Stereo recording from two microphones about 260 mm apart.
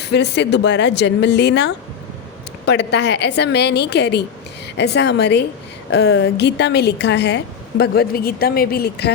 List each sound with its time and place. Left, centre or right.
0.0 s speech: left